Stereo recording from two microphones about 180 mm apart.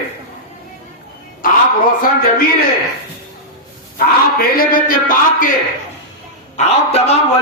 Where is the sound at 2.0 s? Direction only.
55° left (ahead or behind).